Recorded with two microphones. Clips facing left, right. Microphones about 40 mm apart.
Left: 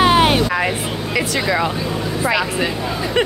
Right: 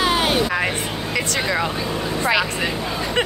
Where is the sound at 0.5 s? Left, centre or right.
Centre.